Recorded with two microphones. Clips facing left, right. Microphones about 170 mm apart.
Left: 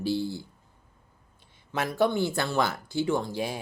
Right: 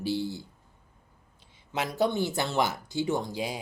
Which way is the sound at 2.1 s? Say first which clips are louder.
Left 1 dB; 20° right (ahead or behind).